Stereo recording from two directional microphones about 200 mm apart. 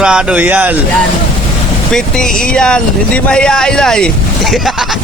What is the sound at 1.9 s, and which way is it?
Speech, 5° left (ahead or behind).